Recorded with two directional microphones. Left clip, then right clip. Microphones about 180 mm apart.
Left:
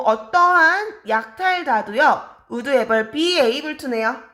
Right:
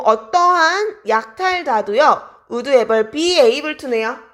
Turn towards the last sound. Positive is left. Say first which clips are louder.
# right 2 dB
turn(degrees=-40)  # may be behind; listen again after turning